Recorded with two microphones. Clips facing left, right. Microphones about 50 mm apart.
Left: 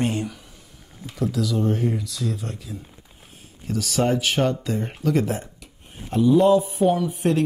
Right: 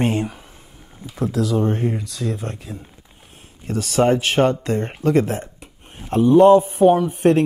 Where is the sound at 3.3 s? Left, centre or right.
Right.